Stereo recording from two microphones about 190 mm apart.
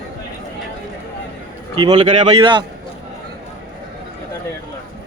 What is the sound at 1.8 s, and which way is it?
Speech, 25° right (ahead or behind).